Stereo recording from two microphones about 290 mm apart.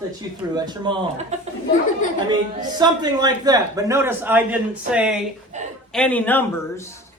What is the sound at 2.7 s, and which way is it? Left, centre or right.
A man's voice, centre.